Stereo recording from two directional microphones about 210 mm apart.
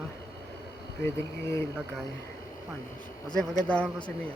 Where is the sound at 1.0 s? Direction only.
15° left (ahead or behind).